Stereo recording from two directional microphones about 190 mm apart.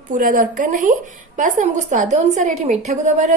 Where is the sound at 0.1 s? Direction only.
45° right (ahead or behind).